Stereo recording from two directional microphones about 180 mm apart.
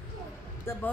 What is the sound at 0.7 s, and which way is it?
Speech, 15° left (ahead or behind).